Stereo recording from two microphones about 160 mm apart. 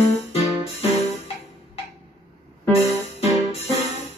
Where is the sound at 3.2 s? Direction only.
40° left (ahead or behind).